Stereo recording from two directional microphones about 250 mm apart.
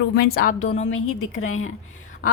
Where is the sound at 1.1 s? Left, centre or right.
Left.